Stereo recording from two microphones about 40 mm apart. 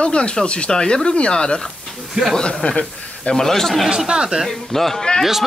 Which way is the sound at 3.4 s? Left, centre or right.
Centre.